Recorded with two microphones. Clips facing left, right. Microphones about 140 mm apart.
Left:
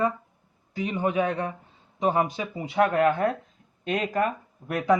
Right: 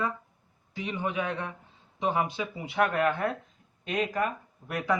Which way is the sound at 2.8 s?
30° left (ahead or behind).